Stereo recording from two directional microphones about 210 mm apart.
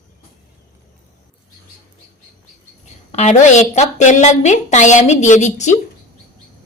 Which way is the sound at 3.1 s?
35° left (ahead or behind).